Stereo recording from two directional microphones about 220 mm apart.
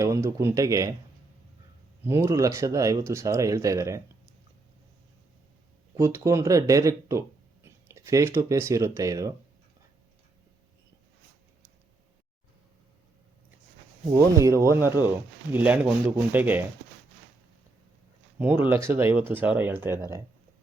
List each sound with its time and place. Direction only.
0.0 s speech: 15° right (ahead or behind)
2.0 s speech: 10° right (ahead or behind)
6.0 s speech: 15° right (ahead or behind)
14.3 s speech: 15° right (ahead or behind)
18.3 s speech: 10° right (ahead or behind)